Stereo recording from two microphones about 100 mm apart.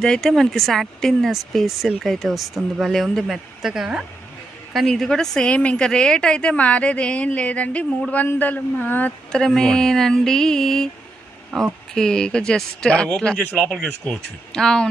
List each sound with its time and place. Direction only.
0.0 s speech: 5° left (ahead or behind)
9.3 s speech: 5° left (ahead or behind)